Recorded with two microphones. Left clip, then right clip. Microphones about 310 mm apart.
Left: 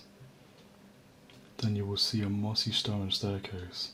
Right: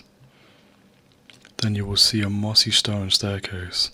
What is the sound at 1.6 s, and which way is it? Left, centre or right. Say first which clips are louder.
Speech: right 12 dB; right.